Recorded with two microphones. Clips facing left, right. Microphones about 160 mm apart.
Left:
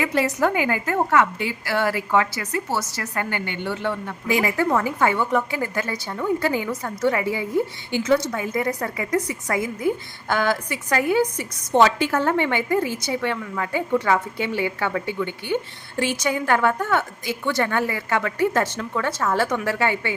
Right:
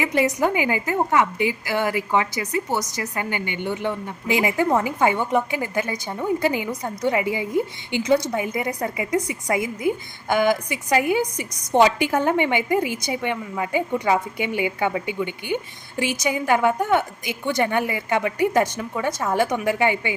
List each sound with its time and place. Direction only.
0.0 s a woman's voice: 15° right (ahead or behind)